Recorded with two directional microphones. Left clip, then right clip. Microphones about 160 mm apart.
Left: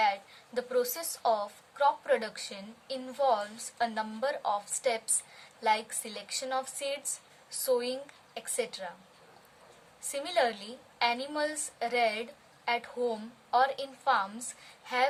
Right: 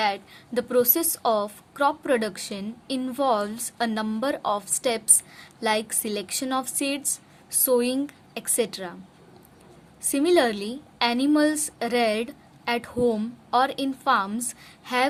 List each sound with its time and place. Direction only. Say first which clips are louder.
0.0 s a woman's voice: right 3 dB; 50° right (ahead or behind)
10.1 s a woman's voice: right 8 dB; 50° right (ahead or behind)